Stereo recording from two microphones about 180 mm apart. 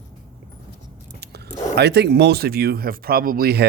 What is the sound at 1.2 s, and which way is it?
Whispering, 65° right (ahead or behind).